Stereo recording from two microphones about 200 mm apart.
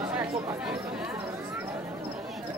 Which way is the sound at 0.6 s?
5° right (ahead or behind).